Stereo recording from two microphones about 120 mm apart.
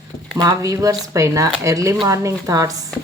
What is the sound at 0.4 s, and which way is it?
Speech, 30° right (ahead or behind).